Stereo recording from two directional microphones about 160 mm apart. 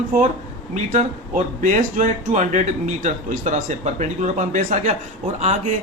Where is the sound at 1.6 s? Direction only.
50° right (ahead or behind).